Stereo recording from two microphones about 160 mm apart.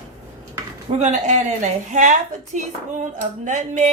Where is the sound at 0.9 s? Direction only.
45° right (ahead or behind).